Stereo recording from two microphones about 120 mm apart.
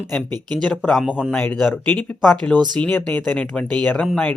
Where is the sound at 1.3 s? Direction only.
10° left (ahead or behind).